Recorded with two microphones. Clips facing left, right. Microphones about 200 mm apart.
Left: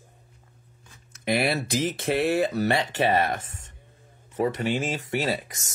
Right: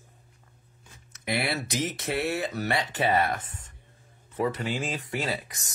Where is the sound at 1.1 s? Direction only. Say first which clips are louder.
Left 5 dB; 30° left (ahead or behind).